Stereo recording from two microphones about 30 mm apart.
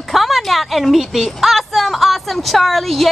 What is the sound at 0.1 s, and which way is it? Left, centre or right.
A woman's voice, centre.